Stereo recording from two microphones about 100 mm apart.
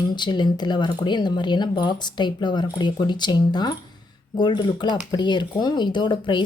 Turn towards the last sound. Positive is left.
turn(degrees=50)  # may be behind; listen again after turning